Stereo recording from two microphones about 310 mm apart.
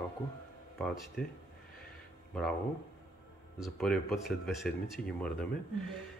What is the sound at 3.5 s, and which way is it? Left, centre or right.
Speech, centre.